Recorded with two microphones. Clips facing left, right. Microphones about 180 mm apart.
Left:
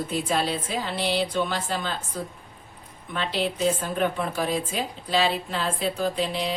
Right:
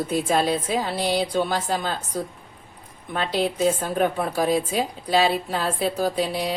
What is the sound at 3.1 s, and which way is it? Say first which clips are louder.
A woman's voice: right 3 dB; 40° right (ahead or behind).